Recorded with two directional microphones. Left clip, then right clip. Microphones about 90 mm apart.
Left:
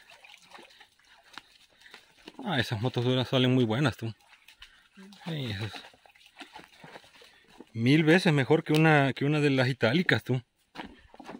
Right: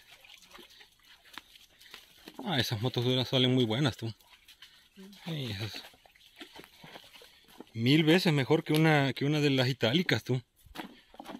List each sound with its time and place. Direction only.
2.4 s speech: 35° left (ahead or behind); by 4.0 s 60° left (ahead or behind)
5.2 s speech: 50° left (ahead or behind)
7.7 s speech: 55° left (ahead or behind)
8.8 s speech: 55° left (ahead or behind)
10.7 s horse: 35° right (ahead or behind)